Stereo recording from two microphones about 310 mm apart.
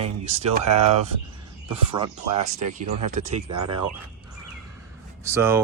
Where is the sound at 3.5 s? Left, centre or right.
Right.